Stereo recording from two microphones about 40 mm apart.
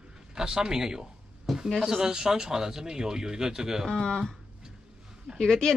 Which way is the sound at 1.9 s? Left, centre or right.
Centre.